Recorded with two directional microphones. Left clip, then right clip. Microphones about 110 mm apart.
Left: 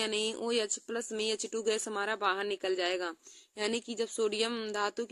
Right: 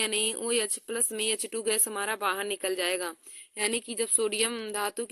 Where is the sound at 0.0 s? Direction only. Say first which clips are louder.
Right 3 dB; 20° right (ahead or behind).